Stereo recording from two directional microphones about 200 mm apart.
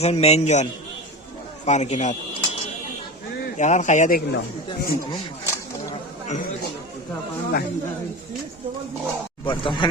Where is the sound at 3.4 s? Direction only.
40° left (ahead or behind).